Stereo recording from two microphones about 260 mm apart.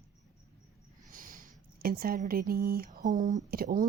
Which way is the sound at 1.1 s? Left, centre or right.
Right.